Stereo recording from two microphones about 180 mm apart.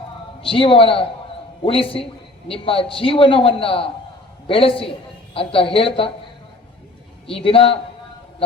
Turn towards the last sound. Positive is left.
turn(degrees=30)  # may be behind; listen again after turning